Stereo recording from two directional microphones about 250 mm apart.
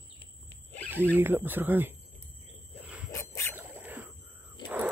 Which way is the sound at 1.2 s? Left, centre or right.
Centre.